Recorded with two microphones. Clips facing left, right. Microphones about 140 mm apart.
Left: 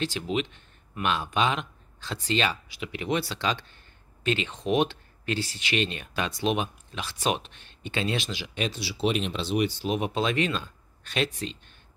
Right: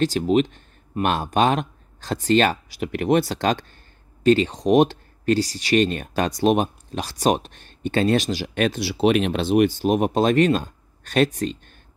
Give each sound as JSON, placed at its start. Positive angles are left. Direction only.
{"t": 0.0, "sound": "speech", "side_deg": -45}